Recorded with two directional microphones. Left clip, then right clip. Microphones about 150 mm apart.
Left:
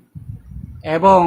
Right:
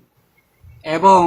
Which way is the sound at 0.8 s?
30° left (ahead or behind).